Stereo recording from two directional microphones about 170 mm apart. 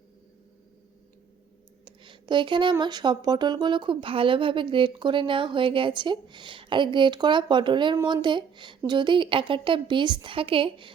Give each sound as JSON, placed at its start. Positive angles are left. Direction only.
{"t": 1.8, "sound": "speech", "side_deg": -25}